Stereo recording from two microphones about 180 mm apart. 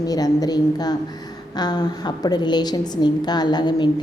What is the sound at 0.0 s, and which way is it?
A woman's voice, 20° left (ahead or behind).